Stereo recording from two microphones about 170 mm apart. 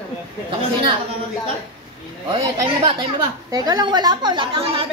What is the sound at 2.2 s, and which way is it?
A woman's voice, 25° right (ahead or behind).